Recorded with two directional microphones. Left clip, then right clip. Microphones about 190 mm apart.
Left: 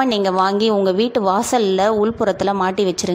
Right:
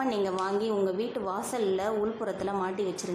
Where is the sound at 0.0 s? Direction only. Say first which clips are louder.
Left 13 dB; 40° left (ahead or behind).